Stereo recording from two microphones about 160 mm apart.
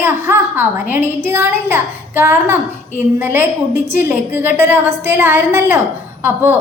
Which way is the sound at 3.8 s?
15° right (ahead or behind).